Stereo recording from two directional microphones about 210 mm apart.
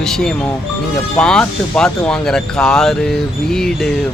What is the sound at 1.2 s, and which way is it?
Speech, 5° left (ahead or behind).